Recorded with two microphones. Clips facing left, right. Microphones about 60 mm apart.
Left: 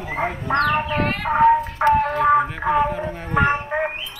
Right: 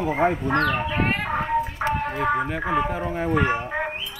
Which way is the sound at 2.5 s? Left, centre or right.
Centre.